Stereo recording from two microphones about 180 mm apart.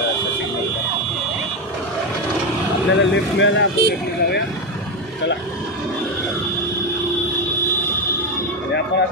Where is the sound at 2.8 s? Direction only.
85° left.